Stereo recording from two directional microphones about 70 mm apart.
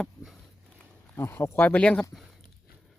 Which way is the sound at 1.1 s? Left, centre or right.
Left.